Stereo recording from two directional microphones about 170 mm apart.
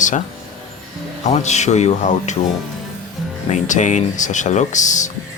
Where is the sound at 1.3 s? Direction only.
40° left (ahead or behind).